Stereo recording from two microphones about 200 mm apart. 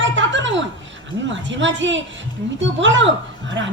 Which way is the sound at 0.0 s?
65° right (ahead or behind).